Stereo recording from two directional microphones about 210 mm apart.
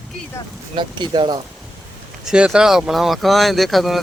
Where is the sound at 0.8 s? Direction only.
20° right (ahead or behind).